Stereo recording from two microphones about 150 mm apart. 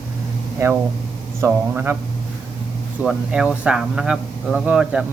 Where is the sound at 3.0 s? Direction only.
5° right (ahead or behind).